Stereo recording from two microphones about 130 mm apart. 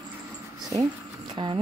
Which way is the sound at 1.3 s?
40° right (ahead or behind).